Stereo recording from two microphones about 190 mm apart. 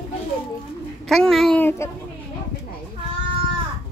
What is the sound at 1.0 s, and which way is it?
Speech, centre (ahead or behind).